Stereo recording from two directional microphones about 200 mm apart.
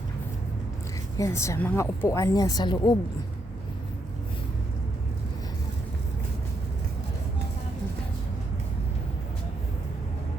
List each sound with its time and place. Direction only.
1.1 s speech: 15° left (ahead or behind)